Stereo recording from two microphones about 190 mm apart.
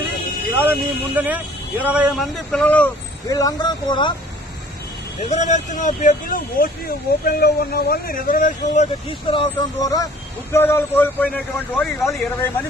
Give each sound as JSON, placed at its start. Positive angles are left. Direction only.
{"t": 0.6, "sound": "speech", "side_deg": -10}
{"t": 3.2, "sound": "speech", "side_deg": 20}
{"t": 5.2, "sound": "a man's voice", "side_deg": 35}